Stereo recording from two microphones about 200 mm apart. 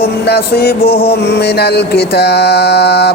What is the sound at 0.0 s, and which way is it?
Male singing, 50° left (ahead or behind).